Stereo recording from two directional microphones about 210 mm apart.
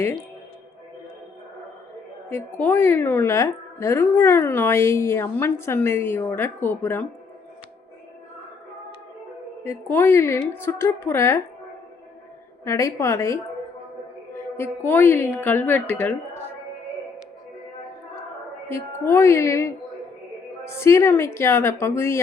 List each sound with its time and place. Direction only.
2.3 s a woman's voice: 10° left (ahead or behind)
9.6 s a woman's voice: 10° left (ahead or behind)
12.6 s a woman's voice: 15° left (ahead or behind)
14.5 s a woman's voice: 10° left (ahead or behind)
18.7 s a woman's voice: 10° left (ahead or behind)